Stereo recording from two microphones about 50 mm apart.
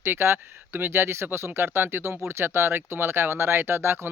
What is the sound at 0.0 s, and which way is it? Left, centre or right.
Speech, right.